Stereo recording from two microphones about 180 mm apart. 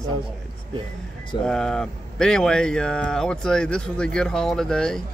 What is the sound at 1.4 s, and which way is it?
Speech, 5° left (ahead or behind).